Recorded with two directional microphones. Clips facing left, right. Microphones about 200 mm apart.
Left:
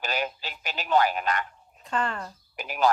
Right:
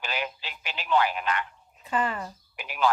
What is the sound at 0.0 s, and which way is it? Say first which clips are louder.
Telephone: left 3 dB; 40° left (ahead or behind).